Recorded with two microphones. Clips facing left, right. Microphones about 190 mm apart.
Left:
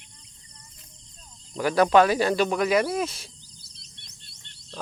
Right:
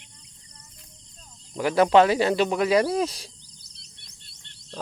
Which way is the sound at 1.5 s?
25° right (ahead or behind).